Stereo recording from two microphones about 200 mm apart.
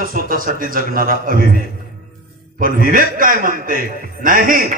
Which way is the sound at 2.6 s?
45° right (ahead or behind).